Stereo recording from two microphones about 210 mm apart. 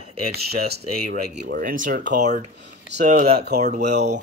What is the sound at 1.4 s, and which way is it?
Speech, 40° right (ahead or behind).